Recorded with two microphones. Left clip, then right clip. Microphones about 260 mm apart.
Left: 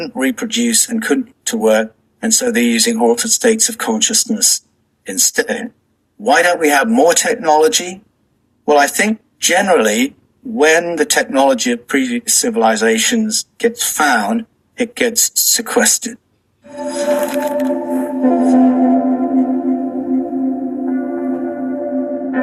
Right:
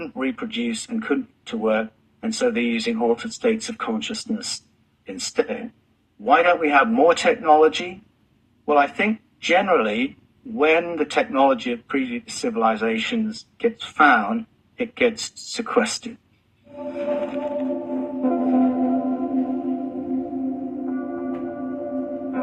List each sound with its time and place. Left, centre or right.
0.0 s speech: left
16.7 s music: left